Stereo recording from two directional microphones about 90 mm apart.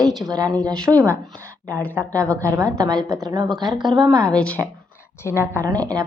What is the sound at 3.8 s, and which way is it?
Speech, 55° right (ahead or behind).